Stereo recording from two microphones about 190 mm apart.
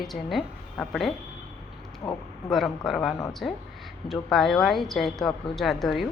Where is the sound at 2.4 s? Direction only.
Centre (ahead or behind).